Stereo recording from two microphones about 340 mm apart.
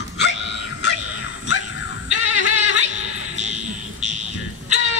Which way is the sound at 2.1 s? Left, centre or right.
Left.